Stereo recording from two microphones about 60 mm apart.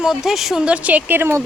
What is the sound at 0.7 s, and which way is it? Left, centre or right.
Speech, right.